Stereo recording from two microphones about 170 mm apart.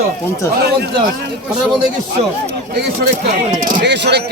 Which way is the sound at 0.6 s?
70° right (ahead or behind).